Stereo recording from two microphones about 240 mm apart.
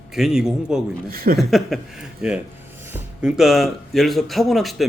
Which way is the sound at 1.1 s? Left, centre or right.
Right.